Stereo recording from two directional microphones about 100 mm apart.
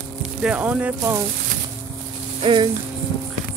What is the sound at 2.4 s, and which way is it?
Rattle, 50° right (ahead or behind).